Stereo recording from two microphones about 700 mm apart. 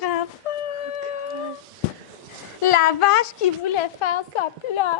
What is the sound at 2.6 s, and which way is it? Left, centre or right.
A child's voice, left.